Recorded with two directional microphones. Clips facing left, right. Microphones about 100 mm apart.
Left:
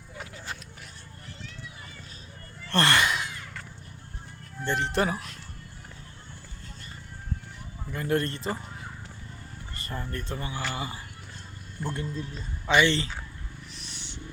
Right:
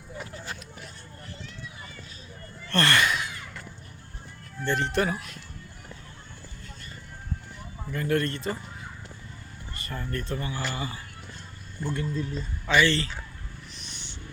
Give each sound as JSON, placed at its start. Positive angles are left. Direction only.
{"t": 2.6, "sound": "a sound", "side_deg": 25}
{"t": 4.6, "sound": "speech", "side_deg": 30}
{"t": 7.9, "sound": "speech", "side_deg": 20}
{"t": 9.7, "sound": "speech", "side_deg": 25}
{"t": 12.0, "sound": "speech", "side_deg": 15}
{"t": 13.7, "sound": "purr", "side_deg": 5}